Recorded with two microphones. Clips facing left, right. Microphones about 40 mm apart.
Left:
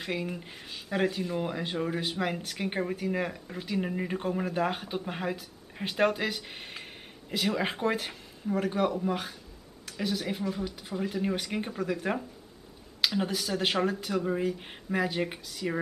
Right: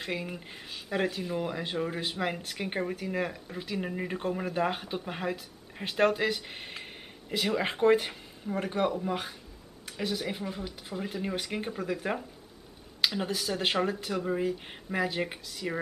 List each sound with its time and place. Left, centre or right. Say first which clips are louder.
0.0 s speech: left 2 dB; centre